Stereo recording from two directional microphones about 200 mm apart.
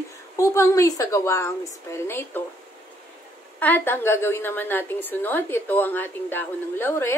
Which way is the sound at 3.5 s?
10° left (ahead or behind).